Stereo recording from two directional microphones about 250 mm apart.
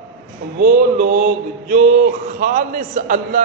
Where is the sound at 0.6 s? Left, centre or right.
Right.